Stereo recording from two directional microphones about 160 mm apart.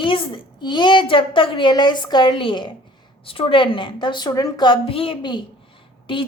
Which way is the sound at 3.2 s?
35° left (ahead or behind).